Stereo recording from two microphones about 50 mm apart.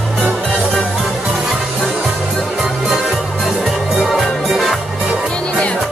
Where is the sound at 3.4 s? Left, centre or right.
Centre.